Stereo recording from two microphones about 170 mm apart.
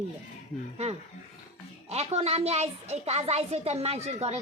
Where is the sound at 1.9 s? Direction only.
40° right (ahead or behind).